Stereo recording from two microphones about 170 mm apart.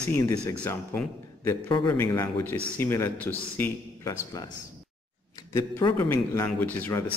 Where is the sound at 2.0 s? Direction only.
15° left (ahead or behind).